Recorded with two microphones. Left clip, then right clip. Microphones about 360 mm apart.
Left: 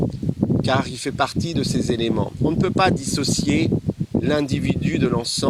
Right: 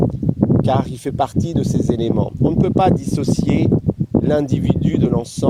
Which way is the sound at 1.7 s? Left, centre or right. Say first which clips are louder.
Right 4 dB; right.